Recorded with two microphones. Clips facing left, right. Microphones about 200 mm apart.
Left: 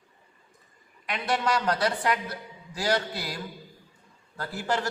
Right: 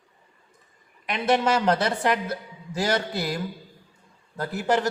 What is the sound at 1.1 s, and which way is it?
A man's voice, 20° right (ahead or behind).